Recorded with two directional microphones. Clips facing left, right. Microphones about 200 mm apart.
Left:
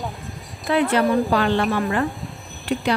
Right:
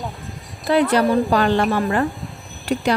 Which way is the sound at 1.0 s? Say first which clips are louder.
Right 1 dB; centre (ahead or behind).